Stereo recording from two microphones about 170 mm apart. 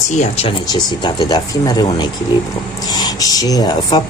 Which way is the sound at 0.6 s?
25° left (ahead or behind).